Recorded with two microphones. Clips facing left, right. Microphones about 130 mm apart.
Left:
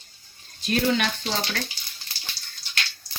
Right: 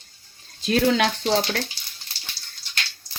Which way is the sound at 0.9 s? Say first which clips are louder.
Right 3 dB; 90° right.